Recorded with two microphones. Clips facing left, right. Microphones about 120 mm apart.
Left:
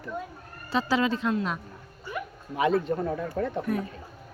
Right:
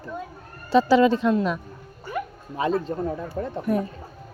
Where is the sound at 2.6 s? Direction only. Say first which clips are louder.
Even; 35° right (ahead or behind).